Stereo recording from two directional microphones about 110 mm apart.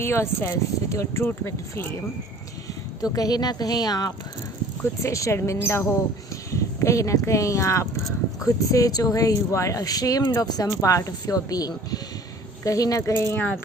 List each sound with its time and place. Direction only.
0.0 s speech: 25° left (ahead or behind)
3.0 s speech: 35° left (ahead or behind)
4.8 s speech: 25° left (ahead or behind)